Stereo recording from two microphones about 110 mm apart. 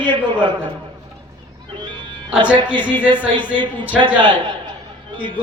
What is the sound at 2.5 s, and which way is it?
Speech, 45° right (ahead or behind).